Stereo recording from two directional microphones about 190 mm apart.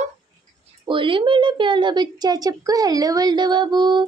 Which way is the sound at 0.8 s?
25° right (ahead or behind).